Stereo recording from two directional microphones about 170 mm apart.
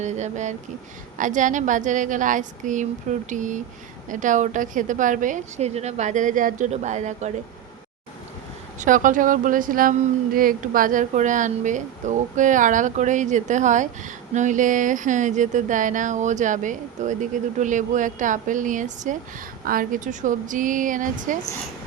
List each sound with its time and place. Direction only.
0.0 s speech: 45° right (ahead or behind)
8.8 s speech: 50° right (ahead or behind)